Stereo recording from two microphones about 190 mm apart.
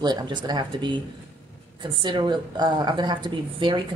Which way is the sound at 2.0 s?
25° right (ahead or behind).